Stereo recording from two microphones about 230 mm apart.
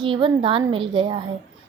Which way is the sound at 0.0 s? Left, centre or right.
Right.